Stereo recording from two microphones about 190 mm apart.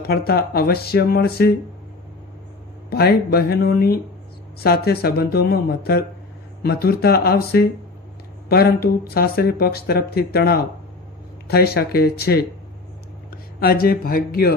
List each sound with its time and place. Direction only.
0.0 s speech: 55° left (ahead or behind)
2.9 s speech: 55° left (ahead or behind)